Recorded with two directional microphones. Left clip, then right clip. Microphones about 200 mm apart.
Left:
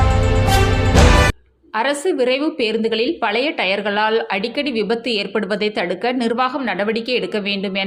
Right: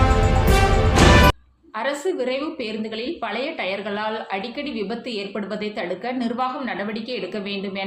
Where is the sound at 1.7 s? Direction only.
40° left (ahead or behind).